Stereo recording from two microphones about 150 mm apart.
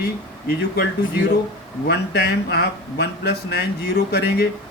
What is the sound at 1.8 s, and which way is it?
Speech, 90° left.